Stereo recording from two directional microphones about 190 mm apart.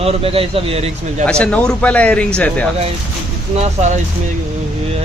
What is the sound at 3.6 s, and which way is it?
Speech, 40° right (ahead or behind).